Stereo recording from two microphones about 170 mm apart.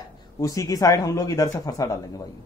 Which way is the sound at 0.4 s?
20° left (ahead or behind).